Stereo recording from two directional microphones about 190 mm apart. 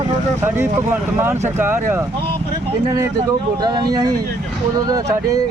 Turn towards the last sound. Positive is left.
turn(degrees=-20)  # may be behind; listen again after turning